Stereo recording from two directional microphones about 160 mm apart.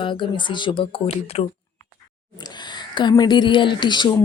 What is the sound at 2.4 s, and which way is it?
Speech, 25° left (ahead or behind).